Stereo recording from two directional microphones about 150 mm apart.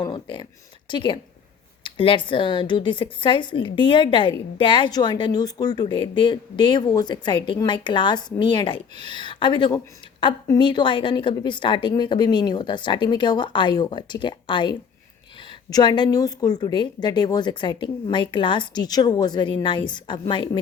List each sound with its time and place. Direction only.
0.0 s speech: 30° left (ahead or behind)